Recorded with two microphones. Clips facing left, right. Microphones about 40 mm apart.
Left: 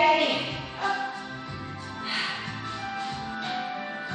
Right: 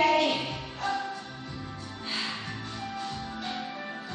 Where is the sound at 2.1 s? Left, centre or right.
Centre.